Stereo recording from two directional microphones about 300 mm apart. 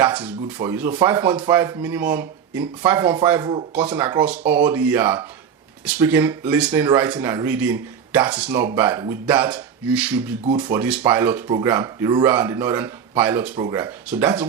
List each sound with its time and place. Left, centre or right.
0.0 s speech: centre
10.4 s speech: right
10.8 s speech: centre